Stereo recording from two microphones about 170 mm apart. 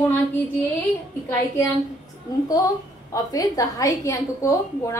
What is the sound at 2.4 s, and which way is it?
A woman's voice, 20° left (ahead or behind).